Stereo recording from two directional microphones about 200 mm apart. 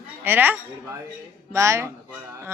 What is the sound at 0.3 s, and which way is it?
Speech, 10° right (ahead or behind).